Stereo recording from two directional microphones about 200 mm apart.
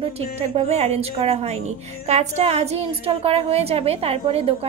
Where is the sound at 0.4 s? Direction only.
30° right (ahead or behind).